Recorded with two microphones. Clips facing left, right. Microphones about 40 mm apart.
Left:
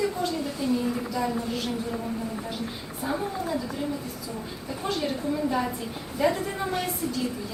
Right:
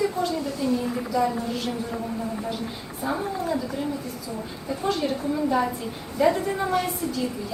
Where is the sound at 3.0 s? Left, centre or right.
Centre.